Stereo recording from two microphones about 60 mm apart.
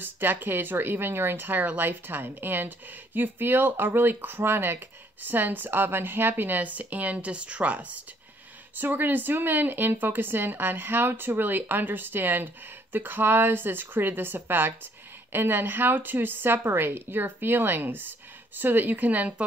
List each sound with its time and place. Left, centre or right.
0.0 s speech: right